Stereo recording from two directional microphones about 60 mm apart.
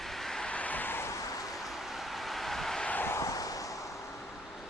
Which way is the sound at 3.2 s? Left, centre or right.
Left.